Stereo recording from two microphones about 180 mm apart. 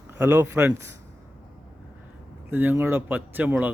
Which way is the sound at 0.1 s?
10° right (ahead or behind).